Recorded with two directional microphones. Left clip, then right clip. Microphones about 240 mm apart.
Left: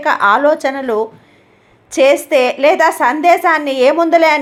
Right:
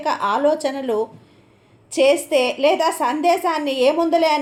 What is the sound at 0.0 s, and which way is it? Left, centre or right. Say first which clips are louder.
A woman's voice: left 8 dB; centre.